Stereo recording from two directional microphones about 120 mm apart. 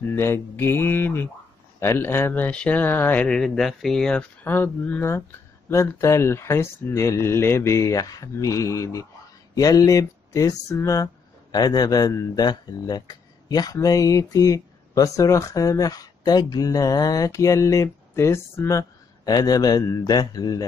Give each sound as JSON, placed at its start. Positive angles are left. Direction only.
{"t": 0.0, "sound": "speech", "side_deg": 20}